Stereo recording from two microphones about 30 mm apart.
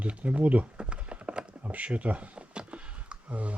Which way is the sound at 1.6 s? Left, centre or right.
Right.